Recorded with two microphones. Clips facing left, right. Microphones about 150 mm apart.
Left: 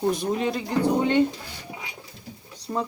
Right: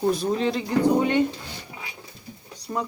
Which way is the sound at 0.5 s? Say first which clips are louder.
Right 2 dB; 20° right (ahead or behind).